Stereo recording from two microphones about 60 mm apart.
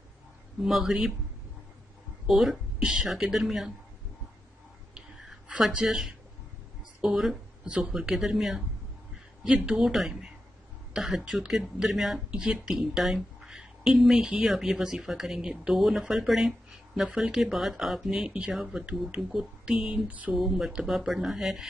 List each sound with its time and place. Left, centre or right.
0.6 s speech: centre
2.2 s speech: centre
5.6 s speech: centre
7.6 s speech: centre
9.7 s speech: centre
12.3 s a woman's voice: centre
20.1 s a sound: right
20.3 s speech: centre